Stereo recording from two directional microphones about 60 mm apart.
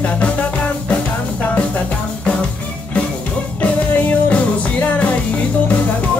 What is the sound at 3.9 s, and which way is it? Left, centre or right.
Music, left.